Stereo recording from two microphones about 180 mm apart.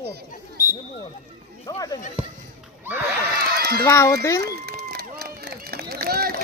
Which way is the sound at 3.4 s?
60° right (ahead or behind).